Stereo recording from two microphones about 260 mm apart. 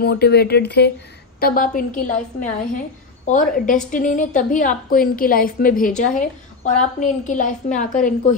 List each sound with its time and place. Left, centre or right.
0.0 s a woman's voice: left